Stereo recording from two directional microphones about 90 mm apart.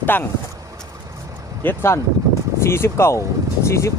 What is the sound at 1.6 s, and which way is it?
Speech, 25° left (ahead or behind).